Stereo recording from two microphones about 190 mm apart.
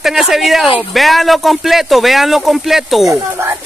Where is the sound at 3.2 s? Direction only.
15° right (ahead or behind).